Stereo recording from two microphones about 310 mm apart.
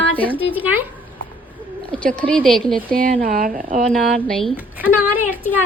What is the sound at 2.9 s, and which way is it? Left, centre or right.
Speech, right.